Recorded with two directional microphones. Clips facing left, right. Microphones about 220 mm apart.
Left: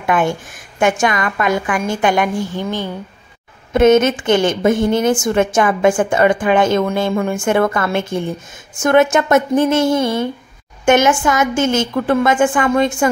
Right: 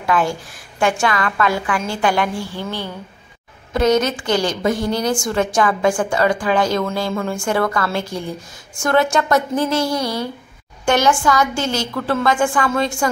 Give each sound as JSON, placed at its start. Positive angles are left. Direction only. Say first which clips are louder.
{"t": 0.0, "sound": "a woman's voice", "louder": "left 2 dB", "side_deg": 20}